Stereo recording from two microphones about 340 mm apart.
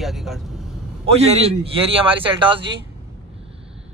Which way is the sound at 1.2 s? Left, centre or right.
Centre.